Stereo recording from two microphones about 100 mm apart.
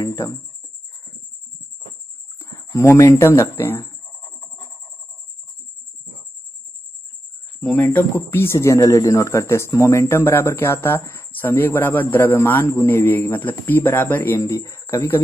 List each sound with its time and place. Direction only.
0.0 s speech: 35° left (ahead or behind)
2.3 s livestock: 25° left (ahead or behind)
3.1 s speech: 30° left (ahead or behind)
7.6 s speech: 20° left (ahead or behind)
14.4 s speech: 35° left (ahead or behind)